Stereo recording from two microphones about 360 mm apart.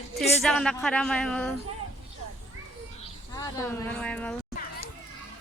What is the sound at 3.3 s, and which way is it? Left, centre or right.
Speech, centre.